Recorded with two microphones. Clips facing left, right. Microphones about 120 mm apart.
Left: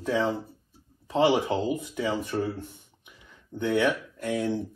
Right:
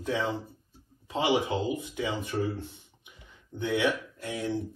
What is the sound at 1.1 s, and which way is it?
Speech, 35° left (ahead or behind).